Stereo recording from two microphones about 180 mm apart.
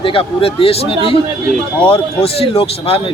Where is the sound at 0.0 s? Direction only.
30° left (ahead or behind).